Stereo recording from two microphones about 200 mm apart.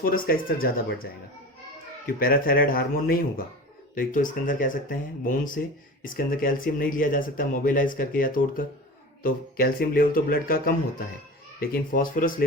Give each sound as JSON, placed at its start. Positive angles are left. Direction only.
{"t": 0.0, "sound": "speech", "side_deg": 45}
{"t": 2.1, "sound": "speech", "side_deg": 45}